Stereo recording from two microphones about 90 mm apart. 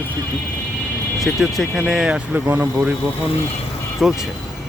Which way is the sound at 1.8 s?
10° right (ahead or behind).